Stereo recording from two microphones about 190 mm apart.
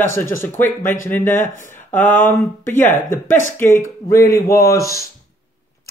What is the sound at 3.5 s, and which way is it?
Speech, 10° left (ahead or behind).